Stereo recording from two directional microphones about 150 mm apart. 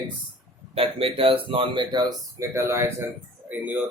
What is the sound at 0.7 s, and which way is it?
Speech, 40° right (ahead or behind).